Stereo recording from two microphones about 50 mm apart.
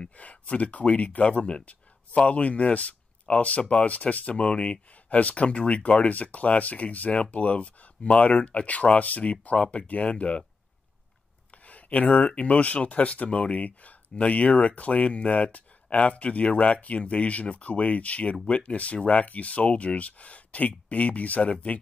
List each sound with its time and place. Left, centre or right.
0.0 s speech: left
11.5 s speech: left